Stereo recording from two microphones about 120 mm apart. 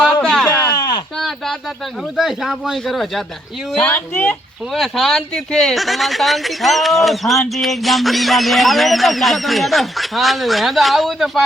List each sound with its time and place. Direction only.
0.0 s a sound: 5° right (ahead or behind)
2.1 s speech: 5° right (ahead or behind)
3.9 s speech: 15° left (ahead or behind)
4.7 s speech: centre (ahead or behind)